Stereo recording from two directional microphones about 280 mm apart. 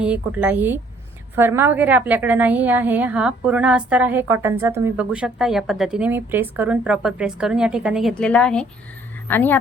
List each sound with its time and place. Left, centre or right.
0.0 s a woman's voice: centre